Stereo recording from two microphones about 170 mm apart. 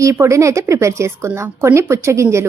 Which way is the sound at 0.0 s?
15° right (ahead or behind).